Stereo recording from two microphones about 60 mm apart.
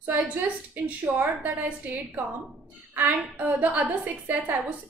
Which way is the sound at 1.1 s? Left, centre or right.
Right.